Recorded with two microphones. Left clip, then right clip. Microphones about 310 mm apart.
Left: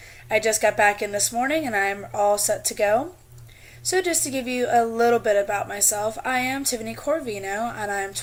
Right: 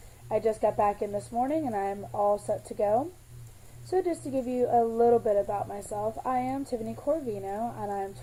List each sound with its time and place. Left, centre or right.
0.3 s a woman's voice: left